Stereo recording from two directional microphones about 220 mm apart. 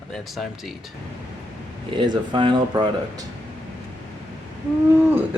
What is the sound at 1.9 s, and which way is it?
Speech, 20° right (ahead or behind).